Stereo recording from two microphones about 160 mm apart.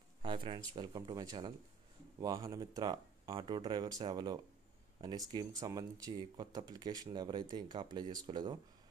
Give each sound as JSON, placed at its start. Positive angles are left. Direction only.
{"t": 0.2, "sound": "speech", "side_deg": -30}